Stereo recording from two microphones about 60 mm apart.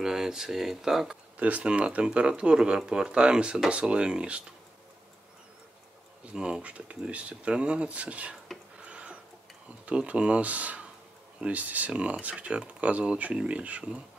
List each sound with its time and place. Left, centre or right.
0.0 s speech: centre
1.3 s speech: right
6.3 s speech: centre
8.8 s a sound: centre
9.8 s speech: centre